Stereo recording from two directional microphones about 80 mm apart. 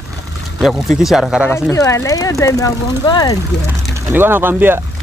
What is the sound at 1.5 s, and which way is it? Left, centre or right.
Speech, left.